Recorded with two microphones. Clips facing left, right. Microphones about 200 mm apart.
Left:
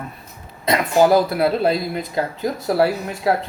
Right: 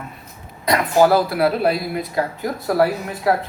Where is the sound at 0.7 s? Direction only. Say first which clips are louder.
Even; 20° left (ahead or behind).